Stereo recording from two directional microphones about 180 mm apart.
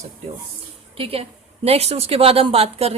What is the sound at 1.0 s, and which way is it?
Speech, 30° right (ahead or behind).